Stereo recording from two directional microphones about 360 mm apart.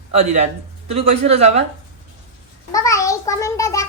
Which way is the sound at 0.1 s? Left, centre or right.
Centre.